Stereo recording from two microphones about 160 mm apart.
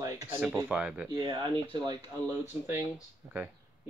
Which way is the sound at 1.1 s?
30° right (ahead or behind).